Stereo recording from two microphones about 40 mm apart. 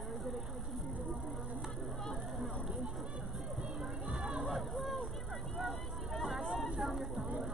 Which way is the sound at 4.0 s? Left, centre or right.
Right.